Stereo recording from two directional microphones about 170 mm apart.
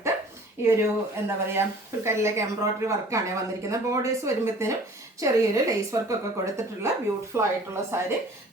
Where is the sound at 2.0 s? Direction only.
15° right (ahead or behind).